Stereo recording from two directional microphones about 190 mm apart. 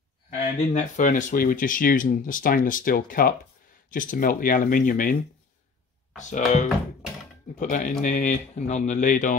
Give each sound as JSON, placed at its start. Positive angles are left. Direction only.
{"t": 0.7, "sound": "speech", "side_deg": 40}
{"t": 6.1, "sound": "speech", "side_deg": 40}